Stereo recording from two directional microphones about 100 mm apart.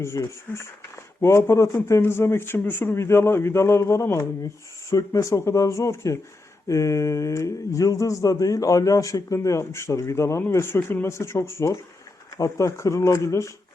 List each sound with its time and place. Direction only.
0.0 s speech: 30° left (ahead or behind)